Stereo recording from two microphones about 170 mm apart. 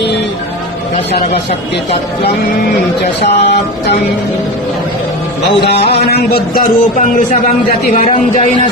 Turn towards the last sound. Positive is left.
turn(degrees=55)  # may be behind; listen again after turning